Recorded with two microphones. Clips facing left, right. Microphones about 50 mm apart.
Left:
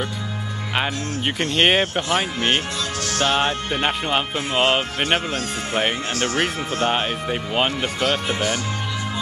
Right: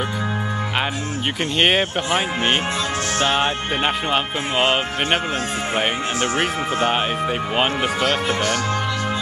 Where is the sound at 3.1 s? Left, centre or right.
Right.